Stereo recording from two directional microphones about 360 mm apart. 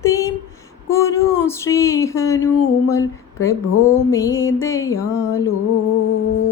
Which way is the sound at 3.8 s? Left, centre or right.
Centre.